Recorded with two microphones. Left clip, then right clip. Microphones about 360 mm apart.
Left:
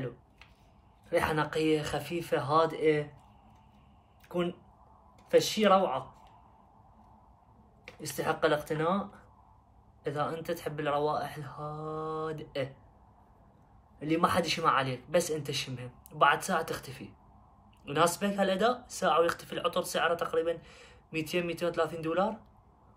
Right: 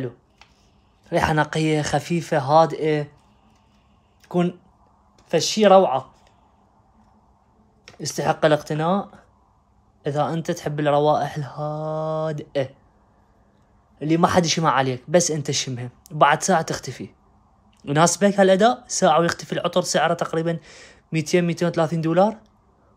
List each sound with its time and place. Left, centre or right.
1.0 s speech: right
4.2 s a sound: right
5.3 s speech: right
8.2 s speech: right
10.0 s speech: right
13.9 s speech: right